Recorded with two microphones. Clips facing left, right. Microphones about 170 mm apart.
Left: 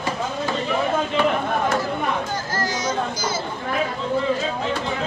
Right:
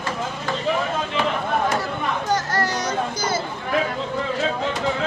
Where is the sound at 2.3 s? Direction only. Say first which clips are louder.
Right 3 dB; 70° right (ahead or behind).